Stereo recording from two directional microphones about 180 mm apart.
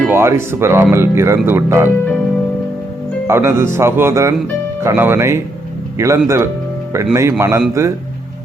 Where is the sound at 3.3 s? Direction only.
15° right (ahead or behind).